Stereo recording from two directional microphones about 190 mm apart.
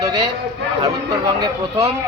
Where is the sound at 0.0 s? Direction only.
20° right (ahead or behind).